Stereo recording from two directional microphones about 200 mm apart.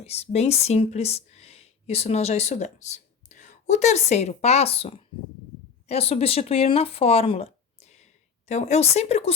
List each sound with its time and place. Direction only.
0.0 s speech: 30° left (ahead or behind)